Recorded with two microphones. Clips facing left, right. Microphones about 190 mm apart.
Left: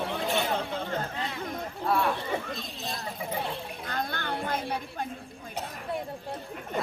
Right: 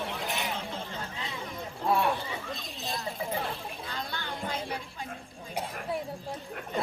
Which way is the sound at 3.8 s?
55° left (ahead or behind).